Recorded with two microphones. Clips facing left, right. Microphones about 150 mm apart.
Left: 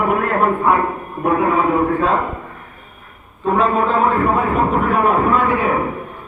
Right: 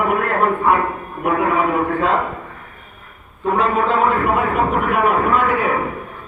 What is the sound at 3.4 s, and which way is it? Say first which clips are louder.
A man's voice: left 1 dB; 30° left (ahead or behind).